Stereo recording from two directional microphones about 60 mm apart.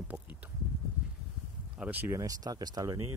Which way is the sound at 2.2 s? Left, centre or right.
Right.